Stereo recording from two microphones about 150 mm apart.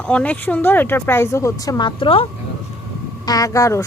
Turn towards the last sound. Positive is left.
turn(degrees=20)  # may be behind; listen again after turning